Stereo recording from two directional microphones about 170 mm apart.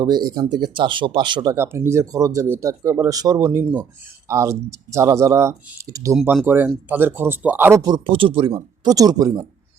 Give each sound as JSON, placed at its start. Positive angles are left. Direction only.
{"t": 0.0, "sound": "speech", "side_deg": -25}
{"t": 1.5, "sound": "speech", "side_deg": -15}
{"t": 6.1, "sound": "speech", "side_deg": -5}